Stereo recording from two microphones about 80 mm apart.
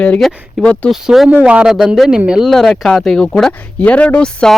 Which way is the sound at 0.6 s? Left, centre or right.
Centre.